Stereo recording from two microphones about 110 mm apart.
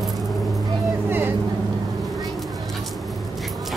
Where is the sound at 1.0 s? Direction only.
20° right (ahead or behind).